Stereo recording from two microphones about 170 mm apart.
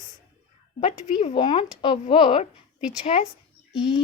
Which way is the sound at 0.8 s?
30° left (ahead or behind).